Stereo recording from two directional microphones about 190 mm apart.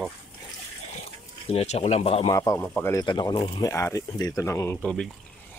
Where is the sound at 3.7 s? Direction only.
15° left (ahead or behind).